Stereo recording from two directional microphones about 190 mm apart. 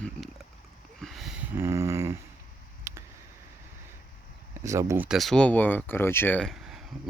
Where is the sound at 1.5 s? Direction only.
15° right (ahead or behind).